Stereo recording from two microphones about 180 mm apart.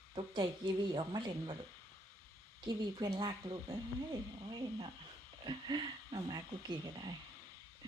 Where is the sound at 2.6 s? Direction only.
25° right (ahead or behind).